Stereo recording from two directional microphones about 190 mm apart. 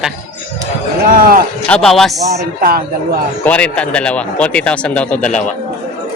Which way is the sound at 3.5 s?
5° left (ahead or behind).